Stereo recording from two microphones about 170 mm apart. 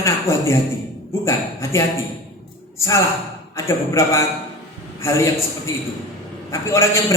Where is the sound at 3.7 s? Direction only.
15° left (ahead or behind).